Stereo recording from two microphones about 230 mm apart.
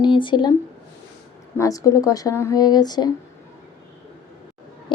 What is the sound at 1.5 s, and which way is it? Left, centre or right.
Speech, centre.